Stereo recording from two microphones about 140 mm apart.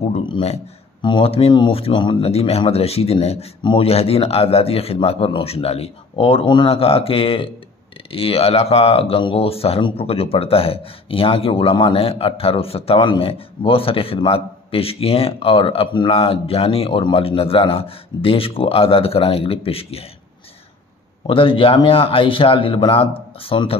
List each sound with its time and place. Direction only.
0.1 s speech: 45° left (ahead or behind)
21.3 s speech: 40° left (ahead or behind)